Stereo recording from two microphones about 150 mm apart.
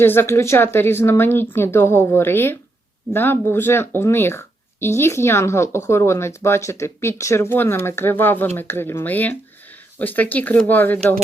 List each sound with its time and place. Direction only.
0.0 s speech: 15° left (ahead or behind)